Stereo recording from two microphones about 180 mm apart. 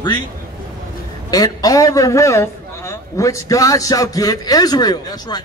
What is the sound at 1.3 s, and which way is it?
A man's voice, 20° left (ahead or behind).